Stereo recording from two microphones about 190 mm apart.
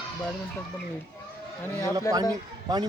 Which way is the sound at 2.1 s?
15° left (ahead or behind).